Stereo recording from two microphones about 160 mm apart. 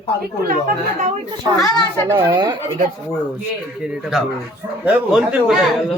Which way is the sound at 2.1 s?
20° right (ahead or behind).